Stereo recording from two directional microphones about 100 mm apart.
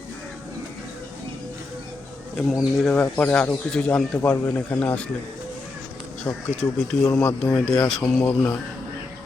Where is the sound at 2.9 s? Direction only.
15° left (ahead or behind).